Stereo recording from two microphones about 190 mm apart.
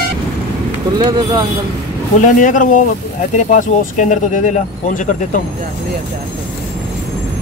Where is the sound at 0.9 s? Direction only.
25° right (ahead or behind).